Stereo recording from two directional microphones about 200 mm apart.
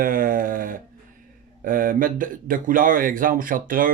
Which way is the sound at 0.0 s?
45° right (ahead or behind).